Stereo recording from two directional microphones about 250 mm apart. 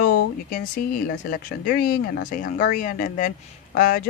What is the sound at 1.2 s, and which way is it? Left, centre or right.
Speech, left.